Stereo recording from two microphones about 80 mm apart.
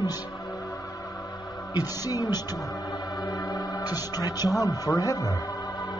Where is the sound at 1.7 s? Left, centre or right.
Left.